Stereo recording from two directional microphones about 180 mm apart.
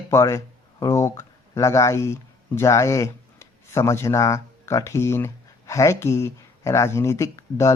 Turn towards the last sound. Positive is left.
turn(degrees=15)  # may be behind; listen again after turning